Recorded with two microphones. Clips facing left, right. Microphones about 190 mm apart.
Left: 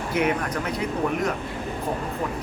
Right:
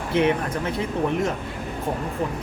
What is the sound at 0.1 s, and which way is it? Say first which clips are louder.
Speech: right 3 dB; 25° right (ahead or behind).